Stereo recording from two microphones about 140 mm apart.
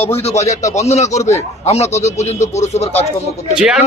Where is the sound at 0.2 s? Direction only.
50° left (ahead or behind).